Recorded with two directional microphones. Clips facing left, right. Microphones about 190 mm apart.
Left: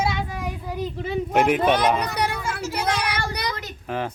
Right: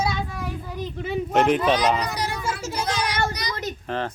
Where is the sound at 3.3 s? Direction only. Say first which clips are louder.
Left 3 dB; 60° left (ahead or behind).